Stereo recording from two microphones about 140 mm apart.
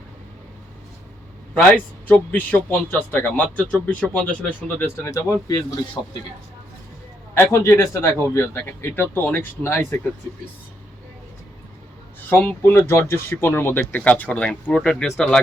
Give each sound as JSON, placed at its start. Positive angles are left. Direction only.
{"t": 1.5, "sound": "a man's voice", "side_deg": 10}
{"t": 4.9, "sound": "speech", "side_deg": 20}
{"t": 7.3, "sound": "a man's voice", "side_deg": 20}
{"t": 12.3, "sound": "a man's voice", "side_deg": 15}